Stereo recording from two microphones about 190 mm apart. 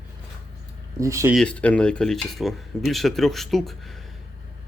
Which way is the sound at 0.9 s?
15° right (ahead or behind).